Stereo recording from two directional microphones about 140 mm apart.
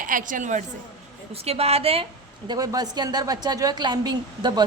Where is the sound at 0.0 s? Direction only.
70° right (ahead or behind).